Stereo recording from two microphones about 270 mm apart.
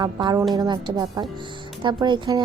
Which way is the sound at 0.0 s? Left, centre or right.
Centre.